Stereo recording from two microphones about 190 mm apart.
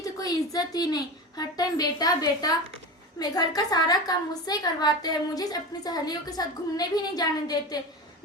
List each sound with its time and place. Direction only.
0.0 s a woman's voice: 20° left (ahead or behind)